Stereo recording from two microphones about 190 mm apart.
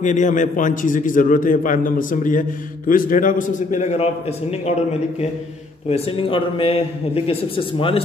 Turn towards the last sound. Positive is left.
turn(degrees=30)  # may be behind; listen again after turning